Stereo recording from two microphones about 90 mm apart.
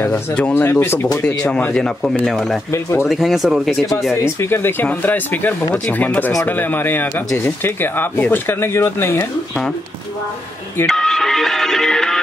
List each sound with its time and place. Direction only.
0.1 s speech: 15° left (ahead or behind)
0.7 s speech: 25° left (ahead or behind)
1.2 s speech: 10° left (ahead or behind)
2.7 s speech: 30° left (ahead or behind)
3.1 s speech: centre (ahead or behind)
4.1 s speech: 30° left (ahead or behind)
10.9 s music: 5° left (ahead or behind)